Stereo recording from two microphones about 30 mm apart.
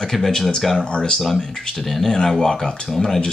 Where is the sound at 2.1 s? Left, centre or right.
Centre.